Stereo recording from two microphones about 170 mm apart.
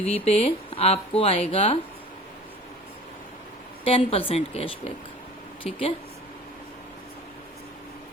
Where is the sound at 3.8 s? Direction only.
35° left (ahead or behind).